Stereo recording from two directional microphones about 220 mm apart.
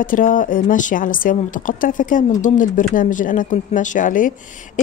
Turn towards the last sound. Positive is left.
turn(degrees=40)  # may be behind; listen again after turning